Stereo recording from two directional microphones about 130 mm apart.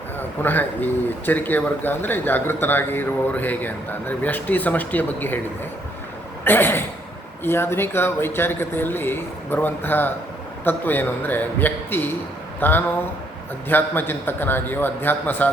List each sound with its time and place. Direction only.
0.2 s speech: 15° left (ahead or behind)
6.4 s speech: 15° left (ahead or behind)